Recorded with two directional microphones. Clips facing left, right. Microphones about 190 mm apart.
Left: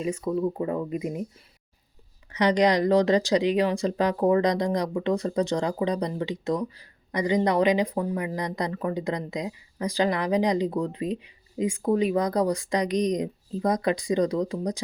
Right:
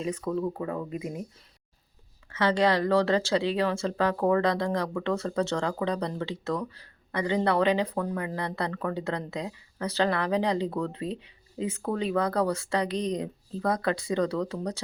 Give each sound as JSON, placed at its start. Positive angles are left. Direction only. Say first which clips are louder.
{"t": 0.0, "sound": "speech", "louder": "left 3 dB", "side_deg": 10}
{"t": 0.5, "sound": "speech", "louder": "left 4 dB", "side_deg": 25}
{"t": 2.3, "sound": "speech", "louder": "left 3 dB", "side_deg": 15}